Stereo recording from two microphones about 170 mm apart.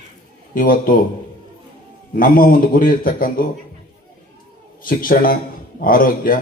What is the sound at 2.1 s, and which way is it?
A man's voice, 55° left (ahead or behind).